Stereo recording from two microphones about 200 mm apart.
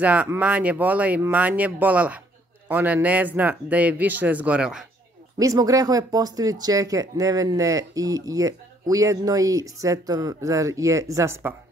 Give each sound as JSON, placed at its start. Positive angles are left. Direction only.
{"t": 0.0, "sound": "speech", "side_deg": -5}
{"t": 5.4, "sound": "speech", "side_deg": -15}